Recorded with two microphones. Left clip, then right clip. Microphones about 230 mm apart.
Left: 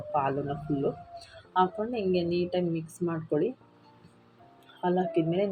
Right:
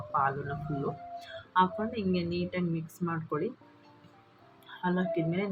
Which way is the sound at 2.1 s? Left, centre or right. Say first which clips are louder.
Left 6 dB; centre.